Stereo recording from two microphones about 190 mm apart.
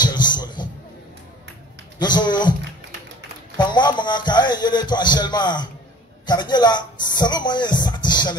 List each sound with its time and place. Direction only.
0.0 s music: 20° left (ahead or behind)
2.0 s a man's voice: 20° left (ahead or behind)
3.5 s a man's voice: 25° left (ahead or behind)